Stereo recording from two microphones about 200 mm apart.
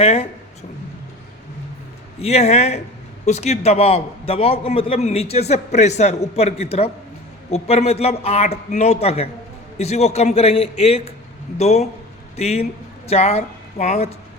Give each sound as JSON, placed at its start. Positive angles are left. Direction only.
{"t": 0.0, "sound": "speech", "side_deg": 30}
{"t": 2.1, "sound": "a man's voice", "side_deg": 30}